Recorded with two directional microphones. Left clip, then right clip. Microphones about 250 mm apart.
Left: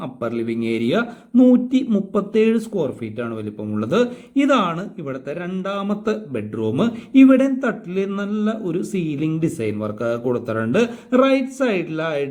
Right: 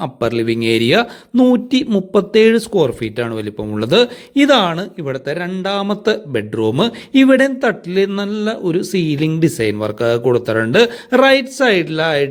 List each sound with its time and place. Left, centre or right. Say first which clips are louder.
0.0 s speech: right 7 dB; right